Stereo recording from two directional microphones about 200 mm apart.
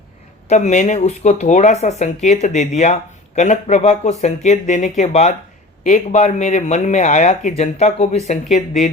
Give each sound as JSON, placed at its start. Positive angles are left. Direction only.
{"t": 0.4, "sound": "speech", "side_deg": 35}